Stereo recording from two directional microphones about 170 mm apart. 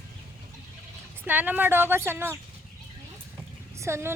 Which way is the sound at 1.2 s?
10° right (ahead or behind).